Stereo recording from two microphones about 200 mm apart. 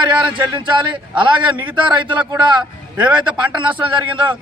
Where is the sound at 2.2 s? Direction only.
5° right (ahead or behind).